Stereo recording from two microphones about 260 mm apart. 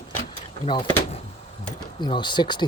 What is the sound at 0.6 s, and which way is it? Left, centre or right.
Speech, centre.